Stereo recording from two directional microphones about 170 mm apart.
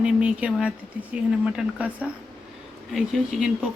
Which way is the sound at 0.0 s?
5° right (ahead or behind).